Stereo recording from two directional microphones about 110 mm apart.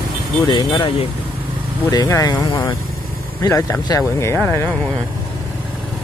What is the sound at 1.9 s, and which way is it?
Speech, 35° left (ahead or behind).